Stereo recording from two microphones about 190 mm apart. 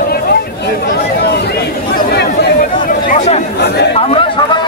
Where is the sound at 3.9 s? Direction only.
30° left (ahead or behind).